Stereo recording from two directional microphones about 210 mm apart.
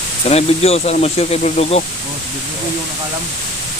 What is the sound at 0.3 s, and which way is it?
Speech, 30° left (ahead or behind).